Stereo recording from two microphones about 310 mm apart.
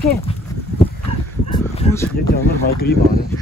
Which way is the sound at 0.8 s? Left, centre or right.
Centre.